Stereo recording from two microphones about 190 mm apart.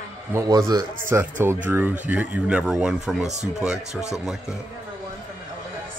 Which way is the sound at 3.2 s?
35° right (ahead or behind).